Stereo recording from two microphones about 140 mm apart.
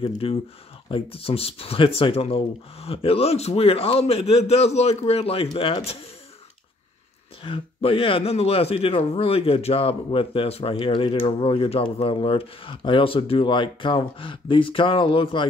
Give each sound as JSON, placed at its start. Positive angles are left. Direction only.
{"t": 0.1, "sound": "speech", "side_deg": 45}
{"t": 7.4, "sound": "a man's voice", "side_deg": 40}